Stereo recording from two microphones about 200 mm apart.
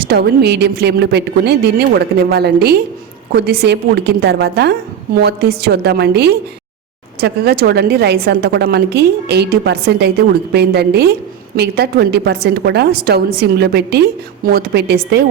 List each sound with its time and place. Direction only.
0.0 s a woman's voice: 55° right (ahead or behind)